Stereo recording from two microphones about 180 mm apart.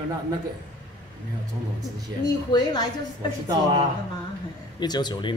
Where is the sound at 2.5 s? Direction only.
20° left (ahead or behind).